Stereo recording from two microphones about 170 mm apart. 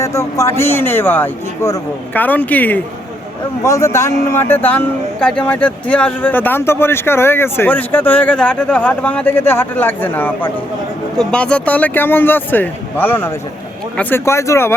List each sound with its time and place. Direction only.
0.0 s speech: 20° left (ahead or behind)